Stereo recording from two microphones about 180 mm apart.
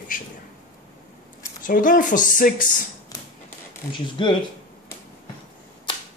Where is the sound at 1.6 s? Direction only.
50° left (ahead or behind).